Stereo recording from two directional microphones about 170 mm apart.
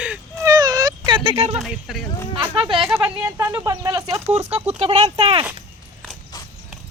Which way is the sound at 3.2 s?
15° right (ahead or behind).